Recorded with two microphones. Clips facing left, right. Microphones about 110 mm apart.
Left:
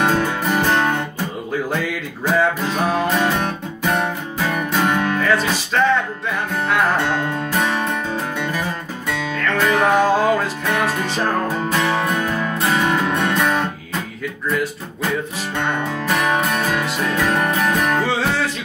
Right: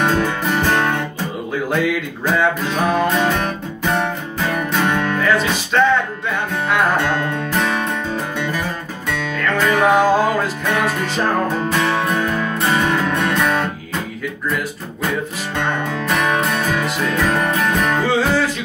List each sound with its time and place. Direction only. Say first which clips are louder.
0.0 s music: right 1 dB; 5° left (ahead or behind)
2.2 s music: even; centre (ahead or behind)
9.4 s music: right 1 dB; 5° right (ahead or behind)
16.3 s music: even; 5° left (ahead or behind)